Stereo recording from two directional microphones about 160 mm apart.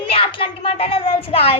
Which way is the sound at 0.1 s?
35° left (ahead or behind).